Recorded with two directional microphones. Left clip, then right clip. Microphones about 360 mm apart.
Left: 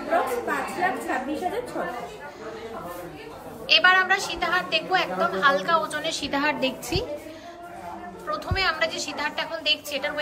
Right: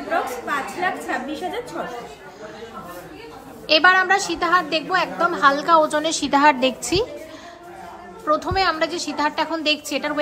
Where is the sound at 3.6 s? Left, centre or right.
Centre.